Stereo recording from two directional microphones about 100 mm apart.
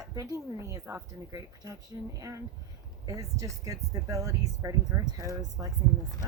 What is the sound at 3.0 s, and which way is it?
Speech, 35° right (ahead or behind).